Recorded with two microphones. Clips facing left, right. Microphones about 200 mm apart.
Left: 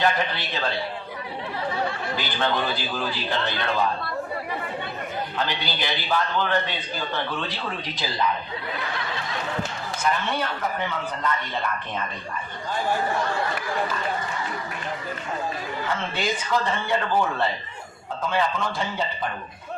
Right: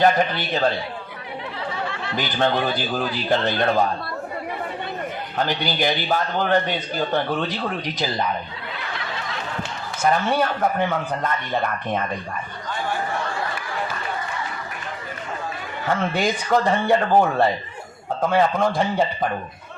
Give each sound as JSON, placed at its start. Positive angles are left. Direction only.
{"t": 0.0, "sound": "a man's voice", "side_deg": -45}
{"t": 2.4, "sound": "a man's voice", "side_deg": -45}
{"t": 5.4, "sound": "a man's voice", "side_deg": -45}
{"t": 10.0, "sound": "a man's voice", "side_deg": -50}
{"t": 15.9, "sound": "a man's voice", "side_deg": -45}